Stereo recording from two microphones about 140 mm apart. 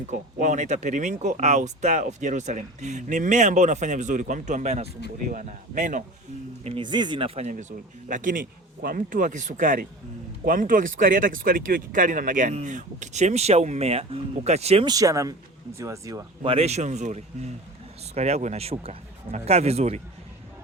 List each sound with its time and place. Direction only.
0.1 s speech: 60° right (ahead or behind)
6.7 s speech: 35° right (ahead or behind)
7.4 s a man's voice: 65° right (ahead or behind)
10.4 s speech: 80° right; by 14.8 s 50° right (ahead or behind)
14.8 s speech: 25° right (ahead or behind)
16.4 s speech: 45° right (ahead or behind)